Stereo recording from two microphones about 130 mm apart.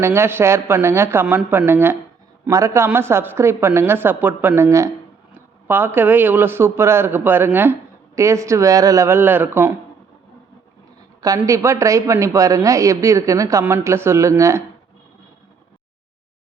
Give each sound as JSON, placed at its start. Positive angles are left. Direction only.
{"t": 0.0, "sound": "a man's voice", "side_deg": -20}
{"t": 11.3, "sound": "a man's voice", "side_deg": -20}